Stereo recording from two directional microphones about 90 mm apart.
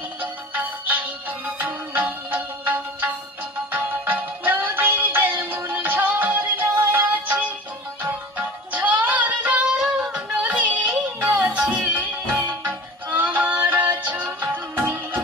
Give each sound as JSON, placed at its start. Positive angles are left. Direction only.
{"t": 1.6, "sound": "music", "side_deg": -20}